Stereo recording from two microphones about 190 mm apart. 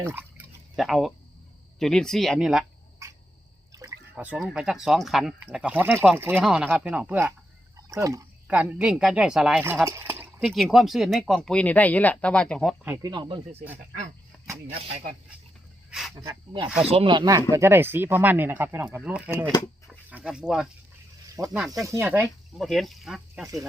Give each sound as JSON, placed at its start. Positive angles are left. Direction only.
{"t": 0.0, "sound": "speech", "side_deg": -10}
{"t": 0.8, "sound": "speech", "side_deg": 0}
{"t": 3.7, "sound": "a sound", "side_deg": -15}
{"t": 4.1, "sound": "speech", "side_deg": -5}
{"t": 13.0, "sound": "speech", "side_deg": -25}
{"t": 15.9, "sound": "snake", "side_deg": 0}
{"t": 16.1, "sound": "speech", "side_deg": -20}
{"t": 21.4, "sound": "speech", "side_deg": -20}
{"t": 22.5, "sound": "speech", "side_deg": 0}